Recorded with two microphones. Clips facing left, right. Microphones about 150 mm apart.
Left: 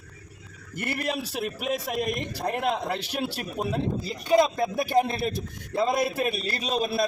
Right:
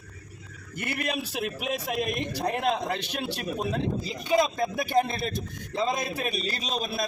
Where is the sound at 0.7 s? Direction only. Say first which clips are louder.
Left 1 dB; centre (ahead or behind).